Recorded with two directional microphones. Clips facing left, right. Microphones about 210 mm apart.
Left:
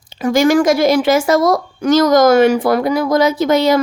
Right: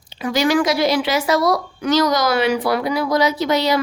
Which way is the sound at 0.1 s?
45° left (ahead or behind).